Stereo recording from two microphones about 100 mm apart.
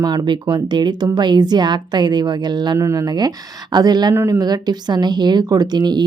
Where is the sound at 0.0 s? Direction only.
45° right (ahead or behind).